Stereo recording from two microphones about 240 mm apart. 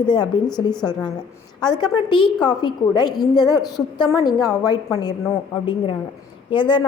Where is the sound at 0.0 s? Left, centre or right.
Centre.